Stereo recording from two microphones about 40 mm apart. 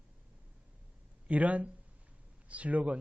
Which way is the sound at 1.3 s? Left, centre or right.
Right.